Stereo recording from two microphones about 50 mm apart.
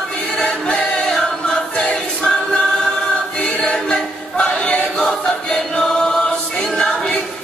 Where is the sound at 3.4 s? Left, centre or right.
Centre.